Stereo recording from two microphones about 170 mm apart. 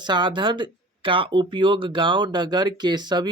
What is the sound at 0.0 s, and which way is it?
Speech, 25° right (ahead or behind).